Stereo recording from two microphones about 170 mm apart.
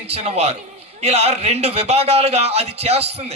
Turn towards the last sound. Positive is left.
turn(degrees=-35)  # may be behind; listen again after turning